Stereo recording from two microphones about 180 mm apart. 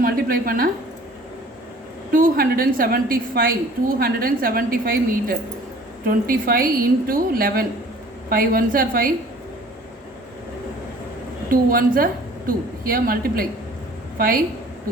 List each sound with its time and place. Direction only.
0.0 s a woman's voice: 55° right (ahead or behind)
2.1 s a woman's voice: 55° right (ahead or behind)
11.7 s a woman's voice: 50° right (ahead or behind)